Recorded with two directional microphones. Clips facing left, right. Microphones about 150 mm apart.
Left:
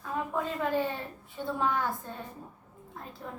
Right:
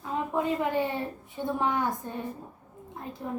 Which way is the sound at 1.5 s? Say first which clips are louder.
Right 2 dB; 15° right (ahead or behind).